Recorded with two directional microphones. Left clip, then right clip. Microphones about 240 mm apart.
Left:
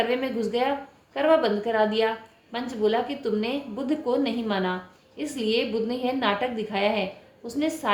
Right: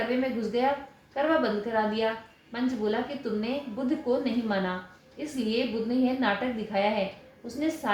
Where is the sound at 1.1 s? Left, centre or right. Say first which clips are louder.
Left 5 dB; left.